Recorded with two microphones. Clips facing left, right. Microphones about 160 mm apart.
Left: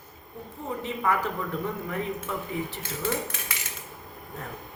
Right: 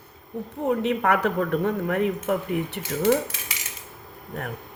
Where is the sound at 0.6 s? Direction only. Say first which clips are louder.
Right 7 dB; 70° right (ahead or behind).